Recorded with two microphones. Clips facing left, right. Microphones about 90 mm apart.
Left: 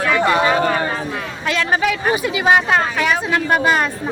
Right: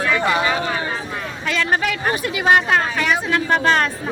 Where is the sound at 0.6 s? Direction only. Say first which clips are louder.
Left 6 dB; 50° left (ahead or behind).